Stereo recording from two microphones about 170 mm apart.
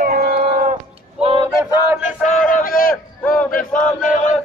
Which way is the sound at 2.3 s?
55° left (ahead or behind).